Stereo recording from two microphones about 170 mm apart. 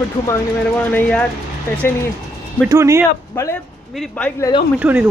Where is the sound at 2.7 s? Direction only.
15° right (ahead or behind).